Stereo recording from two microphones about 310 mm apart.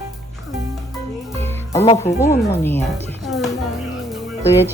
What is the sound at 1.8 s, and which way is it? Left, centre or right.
Speech, centre.